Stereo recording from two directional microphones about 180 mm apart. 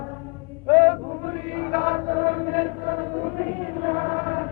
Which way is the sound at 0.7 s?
35° right (ahead or behind).